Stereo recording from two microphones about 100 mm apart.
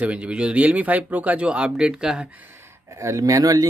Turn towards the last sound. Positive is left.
turn(degrees=-35)  # may be behind; listen again after turning